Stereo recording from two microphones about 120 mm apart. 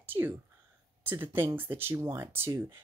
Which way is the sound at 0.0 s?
15° right (ahead or behind).